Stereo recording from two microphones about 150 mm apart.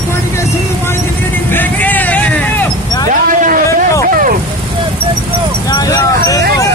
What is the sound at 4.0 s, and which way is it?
Vehicle, 70° right (ahead or behind).